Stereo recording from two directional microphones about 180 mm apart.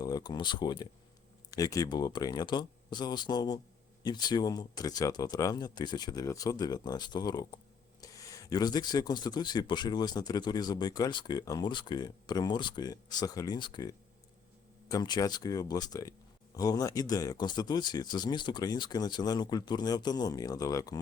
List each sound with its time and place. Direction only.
0.0 s speech: 20° left (ahead or behind)